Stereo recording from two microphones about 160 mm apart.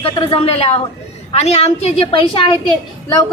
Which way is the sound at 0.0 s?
35° left (ahead or behind).